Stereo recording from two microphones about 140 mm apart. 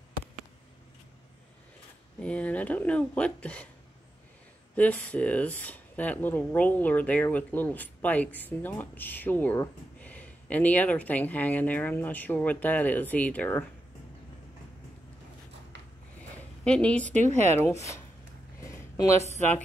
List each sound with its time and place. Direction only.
2.1 s speech: 10° left (ahead or behind)
4.7 s speech: 10° left (ahead or behind)
16.6 s speech: 5° left (ahead or behind)
17.2 s speech: 55° right (ahead or behind)
18.7 s a sound: 20° left (ahead or behind)